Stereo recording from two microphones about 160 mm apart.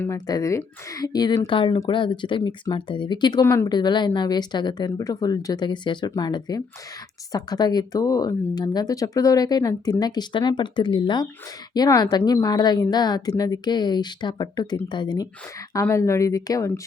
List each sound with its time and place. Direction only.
0.0 s a woman's voice: 20° left (ahead or behind)